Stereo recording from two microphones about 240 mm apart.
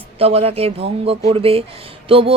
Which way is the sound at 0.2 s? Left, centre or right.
Right.